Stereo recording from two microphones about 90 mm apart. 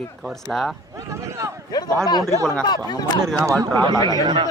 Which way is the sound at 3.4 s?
30° right (ahead or behind).